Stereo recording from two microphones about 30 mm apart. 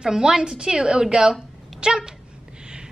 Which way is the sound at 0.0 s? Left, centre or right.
Right.